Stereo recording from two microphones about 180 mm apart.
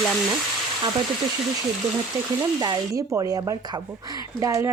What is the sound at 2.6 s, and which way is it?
Speech, 20° right (ahead or behind).